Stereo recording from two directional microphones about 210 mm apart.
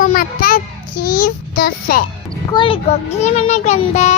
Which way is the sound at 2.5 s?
20° left (ahead or behind).